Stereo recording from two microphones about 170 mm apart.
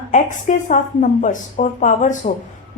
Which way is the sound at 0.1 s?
45° left (ahead or behind).